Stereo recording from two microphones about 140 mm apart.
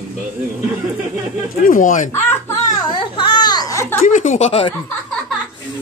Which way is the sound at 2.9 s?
35° left (ahead or behind).